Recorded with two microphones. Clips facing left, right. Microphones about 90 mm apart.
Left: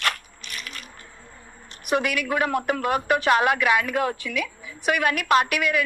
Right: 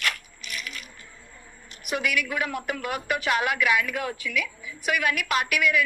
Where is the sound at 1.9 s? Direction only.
30° left (ahead or behind).